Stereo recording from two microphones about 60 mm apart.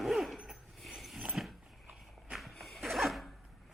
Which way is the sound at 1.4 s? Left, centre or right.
Centre.